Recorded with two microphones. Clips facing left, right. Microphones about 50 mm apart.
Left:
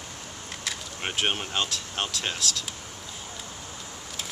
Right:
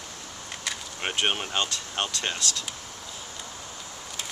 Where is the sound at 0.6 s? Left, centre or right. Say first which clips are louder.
Right 1 dB; centre.